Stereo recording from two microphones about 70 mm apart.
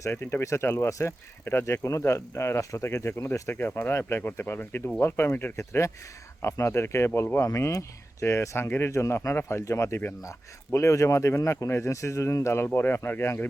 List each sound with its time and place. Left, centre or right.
0.0 s speech: left